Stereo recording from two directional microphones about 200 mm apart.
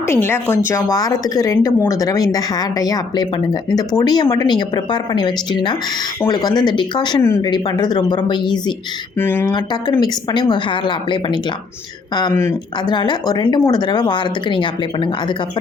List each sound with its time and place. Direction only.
0.1 s speech: 10° left (ahead or behind)
9.1 s speech: 10° left (ahead or behind)
9.5 s speech: 20° left (ahead or behind)
12.3 s speech: 10° left (ahead or behind)